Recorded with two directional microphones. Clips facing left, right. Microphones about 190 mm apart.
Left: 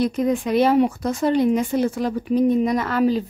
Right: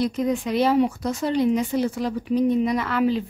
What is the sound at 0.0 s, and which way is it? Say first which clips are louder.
Speech: left 3 dB; 50° left (ahead or behind).